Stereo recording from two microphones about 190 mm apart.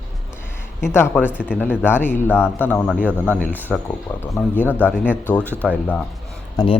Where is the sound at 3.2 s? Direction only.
10° left (ahead or behind).